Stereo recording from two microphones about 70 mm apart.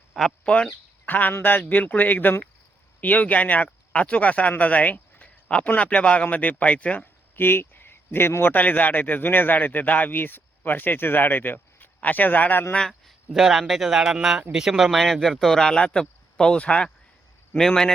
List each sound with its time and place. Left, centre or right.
0.1 s a sound: centre
0.4 s speech: centre
7.3 s speech: left
13.1 s speech: centre